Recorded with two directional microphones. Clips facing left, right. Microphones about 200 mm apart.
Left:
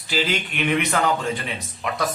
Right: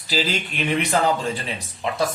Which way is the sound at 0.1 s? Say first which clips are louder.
Even; 30° right (ahead or behind).